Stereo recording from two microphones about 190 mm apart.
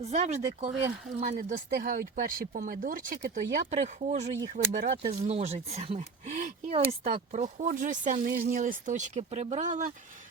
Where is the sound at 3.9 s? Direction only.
40° right (ahead or behind).